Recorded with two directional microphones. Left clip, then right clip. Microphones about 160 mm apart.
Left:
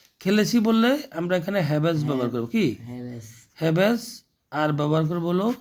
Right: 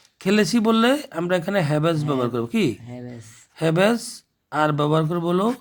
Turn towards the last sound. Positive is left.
turn(degrees=-30)  # may be behind; listen again after turning